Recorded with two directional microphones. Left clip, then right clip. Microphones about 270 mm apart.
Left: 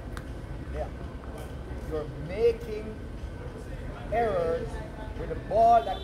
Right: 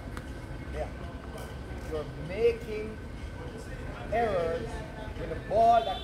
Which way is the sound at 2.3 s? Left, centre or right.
Left.